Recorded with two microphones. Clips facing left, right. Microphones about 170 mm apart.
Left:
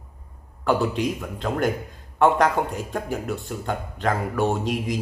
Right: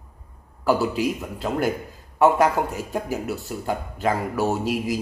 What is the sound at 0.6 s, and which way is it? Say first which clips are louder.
A man's voice: right 1 dB; 5° right (ahead or behind).